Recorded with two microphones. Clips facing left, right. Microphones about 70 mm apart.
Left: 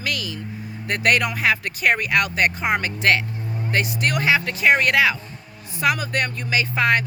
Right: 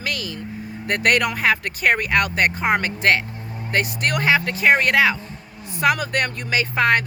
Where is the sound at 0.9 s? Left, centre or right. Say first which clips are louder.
Right 1 dB; right.